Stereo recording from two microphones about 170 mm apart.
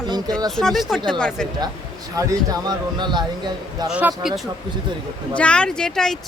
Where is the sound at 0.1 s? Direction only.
25° right (ahead or behind).